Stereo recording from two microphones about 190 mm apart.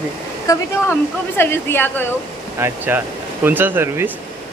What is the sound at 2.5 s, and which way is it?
Speech, 10° right (ahead or behind).